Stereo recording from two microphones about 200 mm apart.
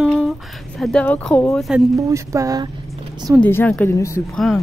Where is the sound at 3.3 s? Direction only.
10° left (ahead or behind).